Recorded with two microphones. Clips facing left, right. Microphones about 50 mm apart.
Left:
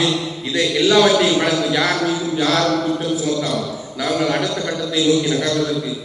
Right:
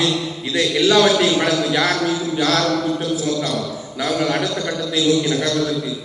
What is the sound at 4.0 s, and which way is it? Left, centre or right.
Speech, centre.